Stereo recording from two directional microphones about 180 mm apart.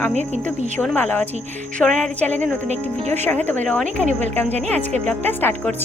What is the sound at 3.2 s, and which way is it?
Speech, 10° left (ahead or behind).